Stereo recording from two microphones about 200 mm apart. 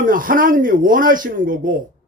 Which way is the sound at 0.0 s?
45° right (ahead or behind).